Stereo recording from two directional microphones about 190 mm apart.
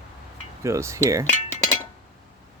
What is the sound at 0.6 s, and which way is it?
Speech, 15° right (ahead or behind).